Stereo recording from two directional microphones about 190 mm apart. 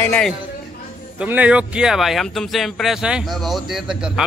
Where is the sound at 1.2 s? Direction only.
5° right (ahead or behind).